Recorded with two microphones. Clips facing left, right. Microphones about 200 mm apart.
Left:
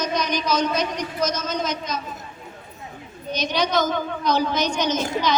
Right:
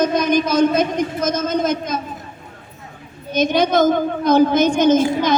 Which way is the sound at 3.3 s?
50° right (ahead or behind).